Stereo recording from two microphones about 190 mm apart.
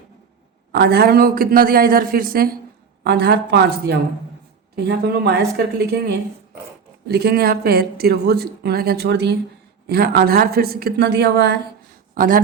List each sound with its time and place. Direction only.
0.7 s a man's voice: 60° right (ahead or behind)
3.0 s speech: 60° right (ahead or behind)
12.1 s speech: 45° right (ahead or behind)